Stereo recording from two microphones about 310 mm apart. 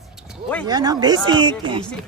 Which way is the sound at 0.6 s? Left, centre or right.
Centre.